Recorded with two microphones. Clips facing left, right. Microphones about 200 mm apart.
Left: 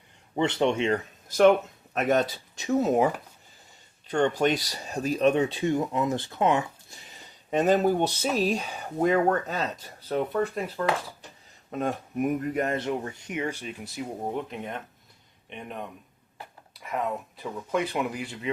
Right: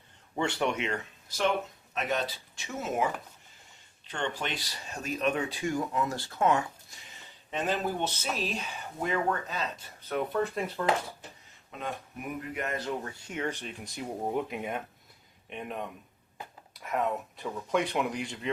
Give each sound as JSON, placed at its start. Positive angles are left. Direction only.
{"t": 0.3, "sound": "speech", "side_deg": 20}
{"t": 1.4, "sound": "speech", "side_deg": 50}
{"t": 6.9, "sound": "speech", "side_deg": 40}
{"t": 10.8, "sound": "speech", "side_deg": -5}
{"t": 11.7, "sound": "speech", "side_deg": 45}
{"t": 12.7, "sound": "speech", "side_deg": 20}